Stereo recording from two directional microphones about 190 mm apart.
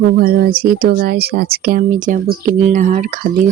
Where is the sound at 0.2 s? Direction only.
50° right (ahead or behind).